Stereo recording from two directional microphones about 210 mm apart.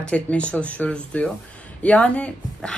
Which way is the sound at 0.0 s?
5° left (ahead or behind).